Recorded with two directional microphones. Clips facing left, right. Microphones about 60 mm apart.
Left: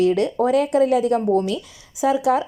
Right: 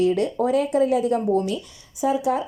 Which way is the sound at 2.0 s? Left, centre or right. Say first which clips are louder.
Left 3 dB; left.